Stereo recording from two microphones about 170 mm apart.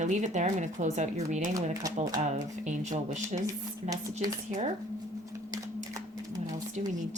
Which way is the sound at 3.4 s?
20° right (ahead or behind).